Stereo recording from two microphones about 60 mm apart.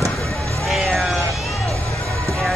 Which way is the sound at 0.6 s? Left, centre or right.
Centre.